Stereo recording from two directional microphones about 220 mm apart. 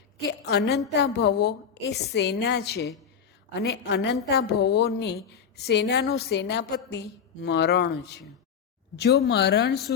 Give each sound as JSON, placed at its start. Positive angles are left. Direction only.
{"t": 0.2, "sound": "a woman's voice", "side_deg": 50}